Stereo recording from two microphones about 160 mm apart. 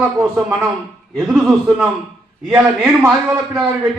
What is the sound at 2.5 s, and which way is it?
A man's voice, 5° right (ahead or behind).